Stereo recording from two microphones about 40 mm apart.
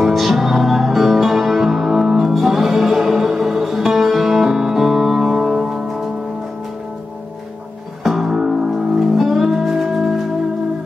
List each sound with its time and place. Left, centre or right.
0.0 s music: centre
8.0 s music: centre